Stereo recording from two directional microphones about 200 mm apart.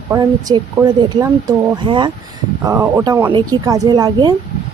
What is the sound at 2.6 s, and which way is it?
Speech, 15° right (ahead or behind).